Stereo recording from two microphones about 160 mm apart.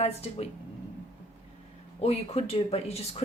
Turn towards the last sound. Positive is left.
turn(degrees=40)  # may be behind; listen again after turning